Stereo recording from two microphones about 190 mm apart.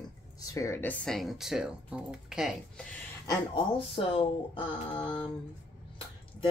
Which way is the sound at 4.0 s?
30° left (ahead or behind).